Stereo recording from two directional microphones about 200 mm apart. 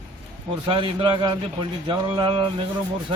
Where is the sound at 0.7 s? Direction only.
25° right (ahead or behind).